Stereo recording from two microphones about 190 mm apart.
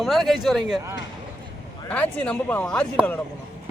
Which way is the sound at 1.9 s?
10° left (ahead or behind).